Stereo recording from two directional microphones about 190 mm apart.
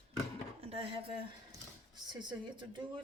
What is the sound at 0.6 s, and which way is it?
Speech, 30° right (ahead or behind).